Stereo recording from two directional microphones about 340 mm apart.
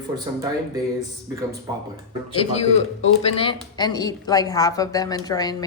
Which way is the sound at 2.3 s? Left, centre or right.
Centre.